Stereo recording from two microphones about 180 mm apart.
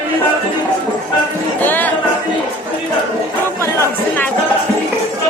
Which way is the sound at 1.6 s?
10° left (ahead or behind).